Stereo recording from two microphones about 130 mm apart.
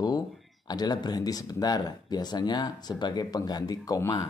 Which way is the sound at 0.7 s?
30° left (ahead or behind).